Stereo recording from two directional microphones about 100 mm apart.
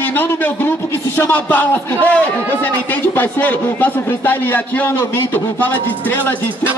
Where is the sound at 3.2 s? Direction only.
15° left (ahead or behind).